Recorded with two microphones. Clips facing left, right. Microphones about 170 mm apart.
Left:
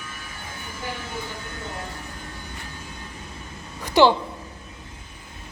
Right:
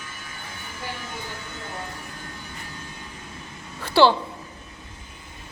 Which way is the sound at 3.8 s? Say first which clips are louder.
Left 1 dB; 15° left (ahead or behind).